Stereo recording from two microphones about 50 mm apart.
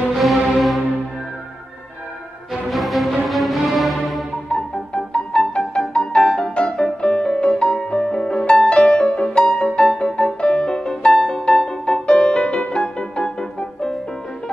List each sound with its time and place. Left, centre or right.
0.1 s music: centre
2.5 s music: centre
4.5 s music: centre